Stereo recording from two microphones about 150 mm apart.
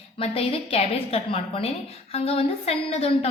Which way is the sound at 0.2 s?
40° left (ahead or behind).